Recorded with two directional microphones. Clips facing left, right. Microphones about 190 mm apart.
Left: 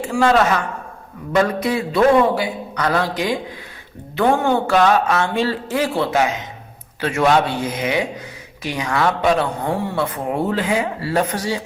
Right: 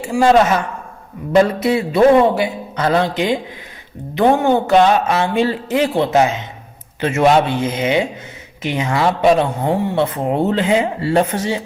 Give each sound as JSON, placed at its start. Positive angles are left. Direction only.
{"t": 0.0, "sound": "a man's voice", "side_deg": -10}